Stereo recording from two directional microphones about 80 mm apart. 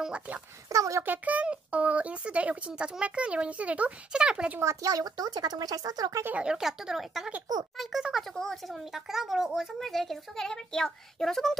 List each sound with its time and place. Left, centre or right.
0.0 s speech: centre
0.7 s speech: right
1.0 s speech: right
4.8 s speech: right
6.4 s speech: centre